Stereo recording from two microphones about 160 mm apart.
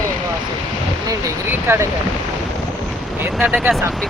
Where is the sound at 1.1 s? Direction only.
15° right (ahead or behind).